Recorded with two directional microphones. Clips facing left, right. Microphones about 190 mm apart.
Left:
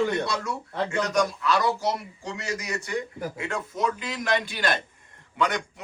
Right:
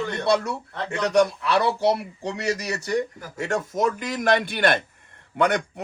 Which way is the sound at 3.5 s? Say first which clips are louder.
Right 6 dB; 45° right (ahead or behind).